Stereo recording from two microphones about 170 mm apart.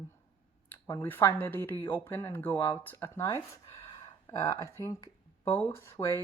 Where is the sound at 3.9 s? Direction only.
20° left (ahead or behind).